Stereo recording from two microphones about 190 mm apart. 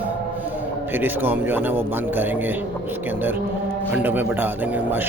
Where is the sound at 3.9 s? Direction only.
10° right (ahead or behind).